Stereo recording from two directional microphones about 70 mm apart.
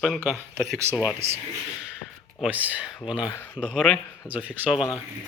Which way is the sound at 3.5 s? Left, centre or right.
Centre.